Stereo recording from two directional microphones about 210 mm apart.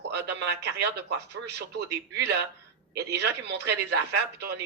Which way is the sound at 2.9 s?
50° right (ahead or behind).